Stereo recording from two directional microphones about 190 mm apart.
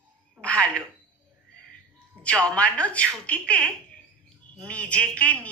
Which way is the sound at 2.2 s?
5° left (ahead or behind).